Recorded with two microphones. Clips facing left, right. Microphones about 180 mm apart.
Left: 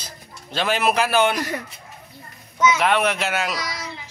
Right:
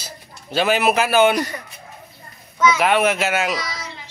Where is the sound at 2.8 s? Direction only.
5° right (ahead or behind).